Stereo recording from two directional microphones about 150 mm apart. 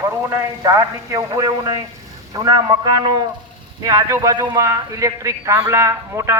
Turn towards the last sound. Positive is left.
turn(degrees=-20)  # may be behind; listen again after turning